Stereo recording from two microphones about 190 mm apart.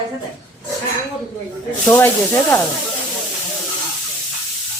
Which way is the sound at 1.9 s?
10° left (ahead or behind).